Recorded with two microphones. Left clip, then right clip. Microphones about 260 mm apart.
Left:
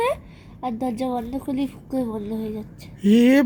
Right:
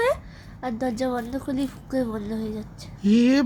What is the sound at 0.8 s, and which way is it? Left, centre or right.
A woman's voice, centre.